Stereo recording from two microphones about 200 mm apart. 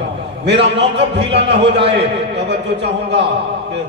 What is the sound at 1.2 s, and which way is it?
Speech, 60° right (ahead or behind).